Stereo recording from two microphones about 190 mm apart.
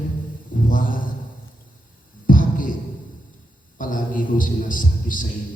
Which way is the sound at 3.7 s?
45° left (ahead or behind).